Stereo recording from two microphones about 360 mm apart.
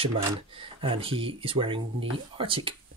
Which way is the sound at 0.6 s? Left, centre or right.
Centre.